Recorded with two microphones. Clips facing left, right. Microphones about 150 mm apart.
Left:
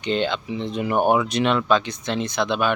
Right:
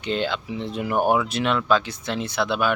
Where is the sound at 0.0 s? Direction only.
5° right (ahead or behind).